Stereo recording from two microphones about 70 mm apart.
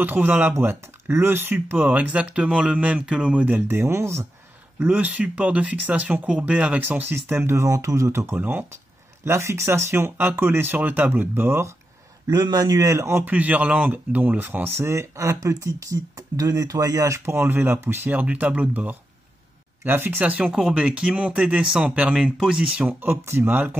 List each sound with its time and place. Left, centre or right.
0.0 s speech: right
3.7 s speech: right
4.7 s speech: right
6.8 s speech: right
7.6 s speech: right
9.2 s speech: right
12.3 s a man's voice: right
12.9 s speech: right
13.2 s speech: right
18.2 s speech: right
20.5 s speech: centre
22.8 s speech: right
23.2 s speech: right
23.5 s speech: right